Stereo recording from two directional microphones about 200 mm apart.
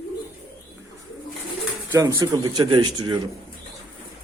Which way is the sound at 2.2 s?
15° right (ahead or behind).